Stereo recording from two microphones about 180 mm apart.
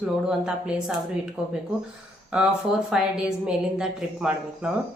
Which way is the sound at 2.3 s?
5° right (ahead or behind).